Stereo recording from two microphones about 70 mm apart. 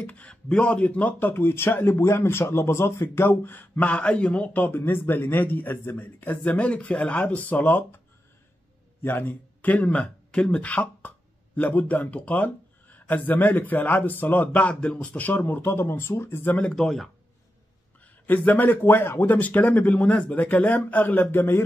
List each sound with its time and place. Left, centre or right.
0.0 s speech: centre
3.8 s a man's voice: centre
9.0 s speech: left
15.4 s speech: left
16.5 s speech: centre
16.8 s speech: centre
18.0 s a man's voice: left